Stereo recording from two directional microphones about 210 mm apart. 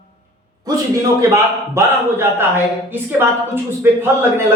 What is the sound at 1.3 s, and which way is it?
A man's voice, 10° right (ahead or behind).